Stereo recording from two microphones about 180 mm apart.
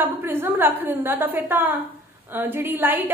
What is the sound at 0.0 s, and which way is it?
A woman's voice, 10° right (ahead or behind).